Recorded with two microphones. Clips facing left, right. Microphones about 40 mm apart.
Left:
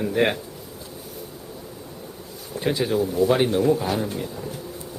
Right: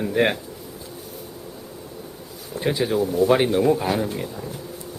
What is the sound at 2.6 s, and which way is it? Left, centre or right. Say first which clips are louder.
Speech: right 1 dB; centre.